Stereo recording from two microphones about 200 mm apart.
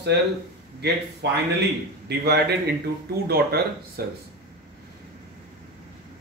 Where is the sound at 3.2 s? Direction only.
50° right (ahead or behind).